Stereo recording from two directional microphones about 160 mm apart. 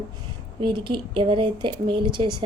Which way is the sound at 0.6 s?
30° right (ahead or behind).